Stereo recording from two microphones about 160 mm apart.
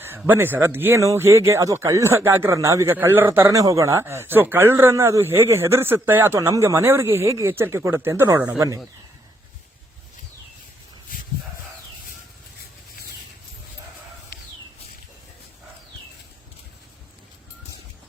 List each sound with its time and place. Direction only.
0.2 s speech: 10° right (ahead or behind)